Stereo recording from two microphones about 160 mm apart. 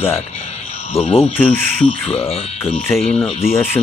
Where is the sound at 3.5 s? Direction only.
15° left (ahead or behind).